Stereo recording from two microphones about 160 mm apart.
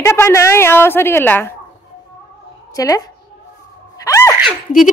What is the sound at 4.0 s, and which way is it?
Gasp, 20° left (ahead or behind).